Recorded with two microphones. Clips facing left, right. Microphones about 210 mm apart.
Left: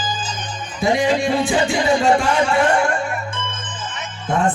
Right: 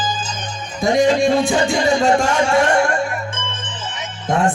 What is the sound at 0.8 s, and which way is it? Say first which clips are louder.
A man's voice: right 3 dB; 45° right (ahead or behind).